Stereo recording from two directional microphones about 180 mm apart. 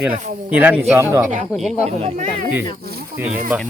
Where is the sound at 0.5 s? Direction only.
10° right (ahead or behind).